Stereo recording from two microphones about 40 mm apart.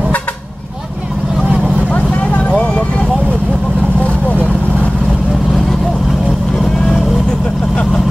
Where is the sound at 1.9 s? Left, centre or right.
Left.